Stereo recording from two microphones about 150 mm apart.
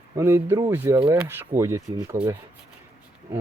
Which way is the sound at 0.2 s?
20° right (ahead or behind).